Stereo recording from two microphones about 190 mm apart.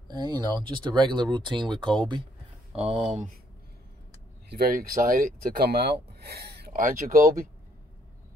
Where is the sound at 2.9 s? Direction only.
35° right (ahead or behind).